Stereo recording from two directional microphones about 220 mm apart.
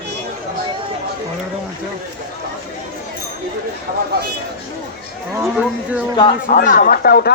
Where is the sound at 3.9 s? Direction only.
40° right (ahead or behind).